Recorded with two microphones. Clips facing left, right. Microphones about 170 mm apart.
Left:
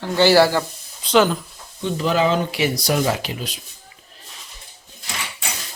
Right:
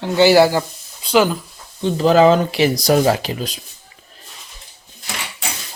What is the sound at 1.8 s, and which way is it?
Speech, 35° right (ahead or behind).